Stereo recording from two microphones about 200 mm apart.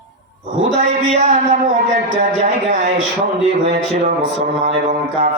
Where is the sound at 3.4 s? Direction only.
30° right (ahead or behind).